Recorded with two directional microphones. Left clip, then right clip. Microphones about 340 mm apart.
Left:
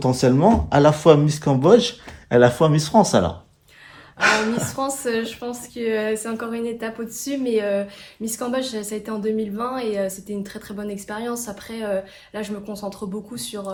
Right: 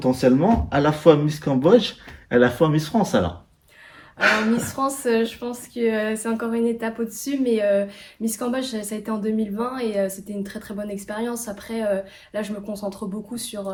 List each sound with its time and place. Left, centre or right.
0.0 s speech: centre
4.7 s speech: centre